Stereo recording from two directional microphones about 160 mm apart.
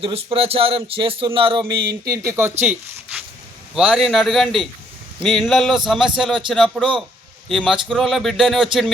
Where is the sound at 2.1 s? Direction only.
15° right (ahead or behind).